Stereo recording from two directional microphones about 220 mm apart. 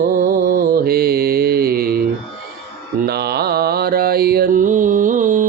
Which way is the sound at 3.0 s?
45° right (ahead or behind).